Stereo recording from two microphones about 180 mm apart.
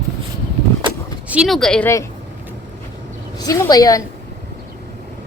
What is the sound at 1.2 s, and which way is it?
Speech, 5° right (ahead or behind).